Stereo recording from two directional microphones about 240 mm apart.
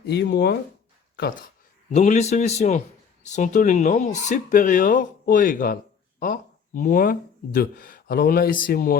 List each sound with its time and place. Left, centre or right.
0.0 s speech: left
1.9 s a man's voice: left